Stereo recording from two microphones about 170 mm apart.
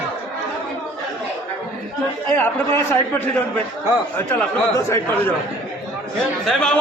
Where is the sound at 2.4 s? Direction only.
10° left (ahead or behind).